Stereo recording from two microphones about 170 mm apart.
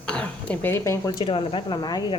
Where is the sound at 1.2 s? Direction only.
30° left (ahead or behind).